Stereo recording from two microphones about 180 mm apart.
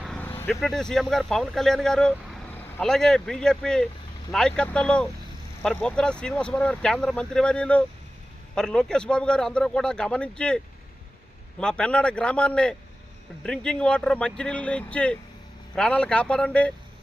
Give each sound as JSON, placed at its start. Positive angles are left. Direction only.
{"t": 0.0, "sound": "speech", "side_deg": 5}
{"t": 11.6, "sound": "speech", "side_deg": 5}